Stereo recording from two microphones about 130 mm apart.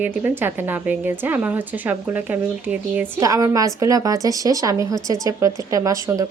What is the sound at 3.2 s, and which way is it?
A woman's voice, 25° right (ahead or behind).